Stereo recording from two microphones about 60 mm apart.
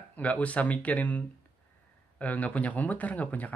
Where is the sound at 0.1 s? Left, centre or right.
Left.